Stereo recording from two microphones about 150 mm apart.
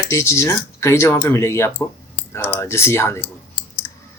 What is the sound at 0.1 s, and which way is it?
Speech, 20° left (ahead or behind).